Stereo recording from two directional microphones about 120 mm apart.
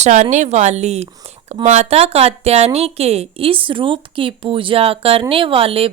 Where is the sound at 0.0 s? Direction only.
85° right.